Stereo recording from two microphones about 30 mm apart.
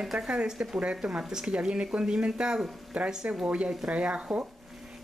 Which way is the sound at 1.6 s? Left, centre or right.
Right.